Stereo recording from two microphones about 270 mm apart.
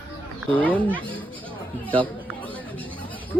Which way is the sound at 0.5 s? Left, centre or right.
Centre.